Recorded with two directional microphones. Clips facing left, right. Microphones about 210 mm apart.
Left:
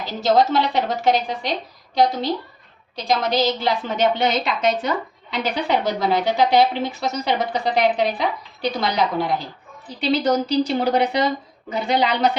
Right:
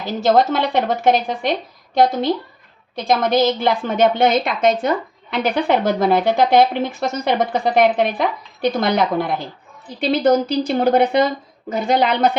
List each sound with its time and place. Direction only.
0.0 s a woman's voice: 55° right (ahead or behind)
2.9 s a woman's voice: 50° right (ahead or behind)